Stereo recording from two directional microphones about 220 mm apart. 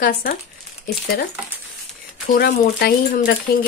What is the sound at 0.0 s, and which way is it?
Speech, 40° left (ahead or behind).